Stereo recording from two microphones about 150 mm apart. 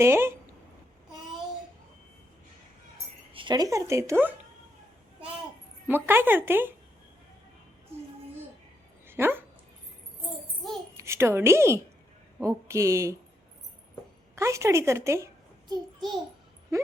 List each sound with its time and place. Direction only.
0.0 s speech: 15° right (ahead or behind)
3.3 s speech: 30° right (ahead or behind)
5.9 s speech: 15° right (ahead or behind)
9.0 s dog: 15° right (ahead or behind)
10.9 s a woman's voice: 20° right (ahead or behind)
14.3 s speech: 20° right (ahead or behind)